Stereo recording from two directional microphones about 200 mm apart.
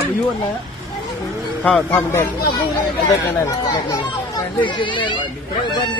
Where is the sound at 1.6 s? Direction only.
5° left (ahead or behind).